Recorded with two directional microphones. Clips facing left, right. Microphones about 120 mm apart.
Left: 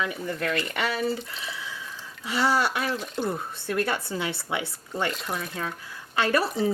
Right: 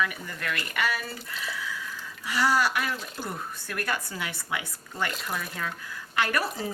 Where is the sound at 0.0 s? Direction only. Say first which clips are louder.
Left 3 dB; 30° left (ahead or behind).